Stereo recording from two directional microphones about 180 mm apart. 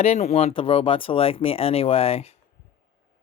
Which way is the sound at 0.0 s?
40° left (ahead or behind).